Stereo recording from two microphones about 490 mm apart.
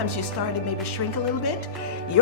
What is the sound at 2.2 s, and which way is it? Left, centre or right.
Music, left.